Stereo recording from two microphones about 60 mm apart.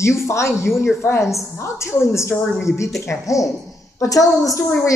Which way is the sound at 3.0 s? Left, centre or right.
Left.